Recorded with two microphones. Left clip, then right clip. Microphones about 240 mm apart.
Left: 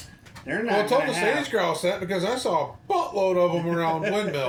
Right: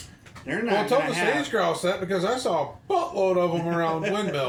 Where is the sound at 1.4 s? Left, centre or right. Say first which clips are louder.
Even; centre.